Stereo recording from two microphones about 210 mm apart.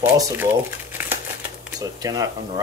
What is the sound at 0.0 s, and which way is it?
Speech, 10° right (ahead or behind).